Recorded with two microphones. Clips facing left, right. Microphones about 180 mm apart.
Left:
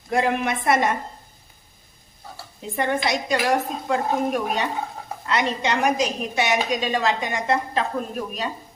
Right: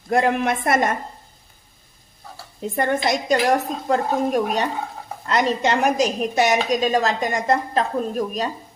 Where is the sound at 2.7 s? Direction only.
45° right (ahead or behind).